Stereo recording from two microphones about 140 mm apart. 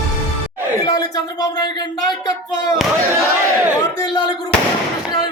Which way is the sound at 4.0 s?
30° left (ahead or behind).